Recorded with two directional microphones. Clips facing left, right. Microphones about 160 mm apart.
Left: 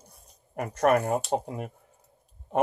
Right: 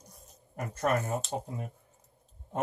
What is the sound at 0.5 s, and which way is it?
Speech, 75° left (ahead or behind).